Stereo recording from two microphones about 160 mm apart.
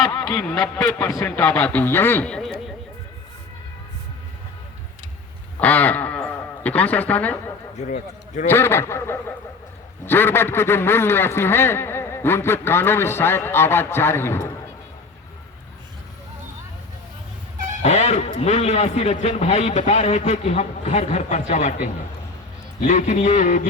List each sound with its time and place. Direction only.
0.0 s a sound: 20° left (ahead or behind)
0.5 s a man's voice: 25° left (ahead or behind)
1.5 s a man's voice: 10° left (ahead or behind)
5.5 s a man's voice: 10° left (ahead or behind)
7.8 s a man's voice: 50° left (ahead or behind)
8.4 s a man's voice: 15° left (ahead or behind)
17.8 s a man's voice: 45° left (ahead or behind)
22.9 s a man's voice: 50° left (ahead or behind)